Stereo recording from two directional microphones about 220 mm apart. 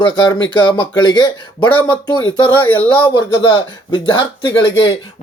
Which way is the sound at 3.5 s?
20° left (ahead or behind).